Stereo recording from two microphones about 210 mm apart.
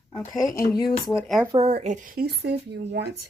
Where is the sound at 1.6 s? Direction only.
30° right (ahead or behind); by 3.1 s 55° right (ahead or behind).